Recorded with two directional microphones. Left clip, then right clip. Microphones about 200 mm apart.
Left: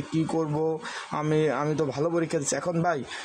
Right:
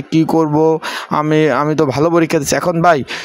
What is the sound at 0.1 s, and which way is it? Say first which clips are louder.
Speech: right 15 dB; 40° right (ahead or behind).